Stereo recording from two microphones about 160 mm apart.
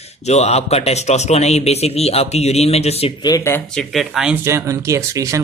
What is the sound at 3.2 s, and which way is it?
Speech, 25° left (ahead or behind).